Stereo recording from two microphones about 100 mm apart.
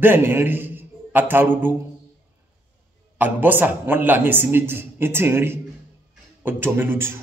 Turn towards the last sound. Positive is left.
turn(degrees=-25)  # may be behind; listen again after turning